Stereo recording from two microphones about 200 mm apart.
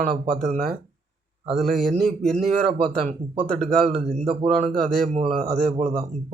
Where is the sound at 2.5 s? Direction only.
30° right (ahead or behind).